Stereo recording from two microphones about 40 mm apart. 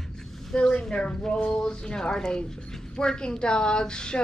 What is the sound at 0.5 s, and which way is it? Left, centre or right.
A woman's voice, centre.